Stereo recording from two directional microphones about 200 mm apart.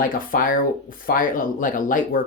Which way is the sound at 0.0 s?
45° left (ahead or behind).